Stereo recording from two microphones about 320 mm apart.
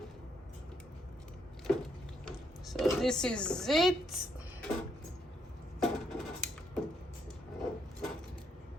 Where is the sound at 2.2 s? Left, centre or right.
Centre.